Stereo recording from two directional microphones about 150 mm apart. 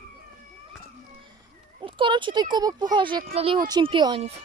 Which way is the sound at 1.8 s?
35° right (ahead or behind).